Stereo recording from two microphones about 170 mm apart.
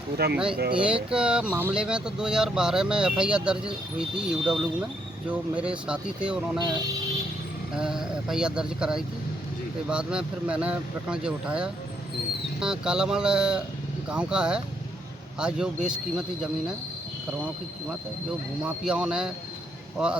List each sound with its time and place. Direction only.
0.2 s speech: 70° right (ahead or behind)
0.7 s speech: 5° right (ahead or behind)
7.8 s speech: 5° right (ahead or behind)
18.9 s speech: 5° right (ahead or behind)